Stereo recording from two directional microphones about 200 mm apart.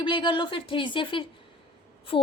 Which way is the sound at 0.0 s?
25° left (ahead or behind).